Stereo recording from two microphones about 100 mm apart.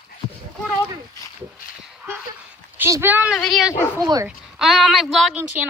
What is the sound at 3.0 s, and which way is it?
Speech, 15° right (ahead or behind).